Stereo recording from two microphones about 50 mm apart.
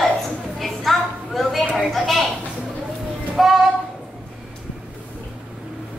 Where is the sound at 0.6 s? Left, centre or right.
Centre.